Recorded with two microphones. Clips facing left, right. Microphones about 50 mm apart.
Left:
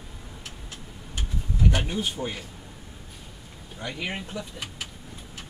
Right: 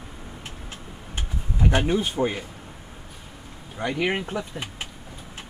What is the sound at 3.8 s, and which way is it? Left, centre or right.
Speech, right.